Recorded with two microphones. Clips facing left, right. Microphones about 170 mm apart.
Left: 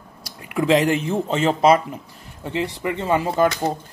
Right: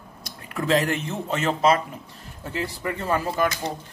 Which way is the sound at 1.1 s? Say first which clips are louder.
Left 5 dB; 30° left (ahead or behind).